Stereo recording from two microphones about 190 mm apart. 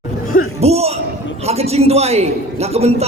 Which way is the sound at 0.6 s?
35° right (ahead or behind).